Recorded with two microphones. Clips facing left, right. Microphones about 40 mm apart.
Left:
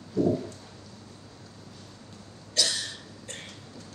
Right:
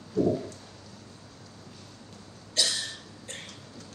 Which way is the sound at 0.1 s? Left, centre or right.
Centre.